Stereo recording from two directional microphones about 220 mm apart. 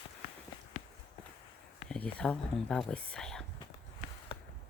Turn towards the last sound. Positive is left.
turn(degrees=0)  # may be behind; listen again after turning